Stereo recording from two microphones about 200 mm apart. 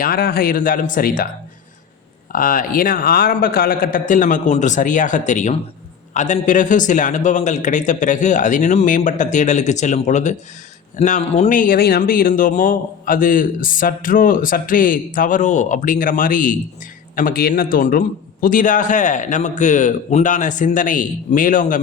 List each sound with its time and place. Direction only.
0.0 s speech: 50° left (ahead or behind)
2.3 s a man's voice: 45° left (ahead or behind)